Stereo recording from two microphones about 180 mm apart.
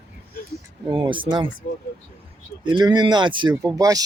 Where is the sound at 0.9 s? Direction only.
25° right (ahead or behind).